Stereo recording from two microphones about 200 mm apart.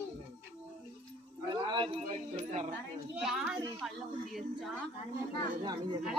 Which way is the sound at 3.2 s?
5° right (ahead or behind).